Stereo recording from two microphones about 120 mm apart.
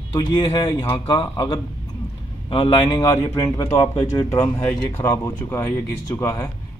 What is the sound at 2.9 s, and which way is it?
Speech, 30° left (ahead or behind).